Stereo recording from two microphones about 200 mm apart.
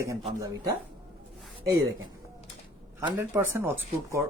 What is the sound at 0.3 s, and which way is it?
Speech, 15° right (ahead or behind).